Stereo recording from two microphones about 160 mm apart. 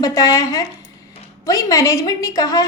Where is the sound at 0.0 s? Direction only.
20° left (ahead or behind).